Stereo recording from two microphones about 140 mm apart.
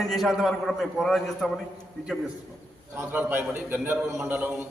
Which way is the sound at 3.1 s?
15° right (ahead or behind).